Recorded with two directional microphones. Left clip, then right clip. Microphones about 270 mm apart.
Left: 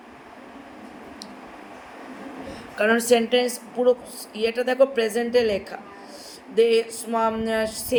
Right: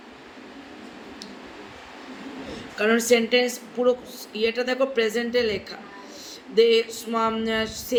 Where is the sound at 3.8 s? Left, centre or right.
Left.